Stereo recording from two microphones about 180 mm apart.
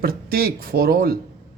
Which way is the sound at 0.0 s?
55° right (ahead or behind).